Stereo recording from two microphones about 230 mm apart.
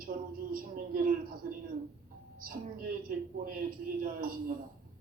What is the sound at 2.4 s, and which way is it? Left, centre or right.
A woman's voice, right.